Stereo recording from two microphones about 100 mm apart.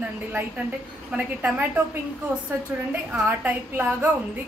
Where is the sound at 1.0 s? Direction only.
15° right (ahead or behind).